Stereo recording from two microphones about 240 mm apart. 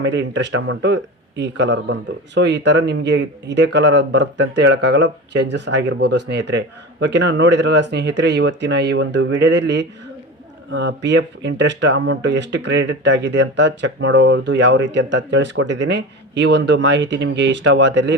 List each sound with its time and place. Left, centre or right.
0.0 s speech: right